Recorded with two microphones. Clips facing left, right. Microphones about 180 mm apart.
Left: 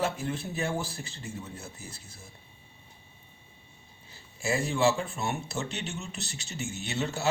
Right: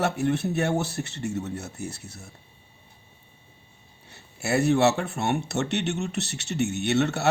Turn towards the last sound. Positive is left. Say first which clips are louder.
# right 9 dB
turn(degrees=-70)  # may be behind; listen again after turning